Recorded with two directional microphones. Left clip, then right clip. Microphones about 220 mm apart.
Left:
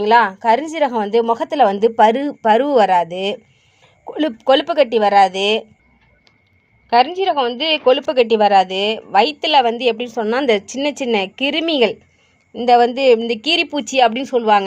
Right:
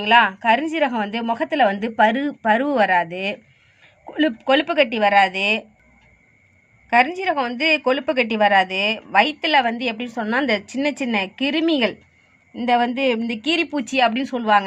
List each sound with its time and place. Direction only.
0.0 s a woman's voice: 30° left (ahead or behind)
7.9 s a woman's voice: 35° left (ahead or behind)